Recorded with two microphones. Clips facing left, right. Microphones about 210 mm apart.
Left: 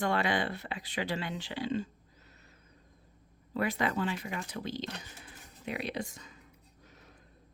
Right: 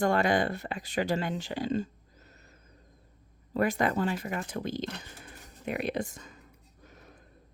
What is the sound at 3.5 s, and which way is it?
Speech, 45° right (ahead or behind).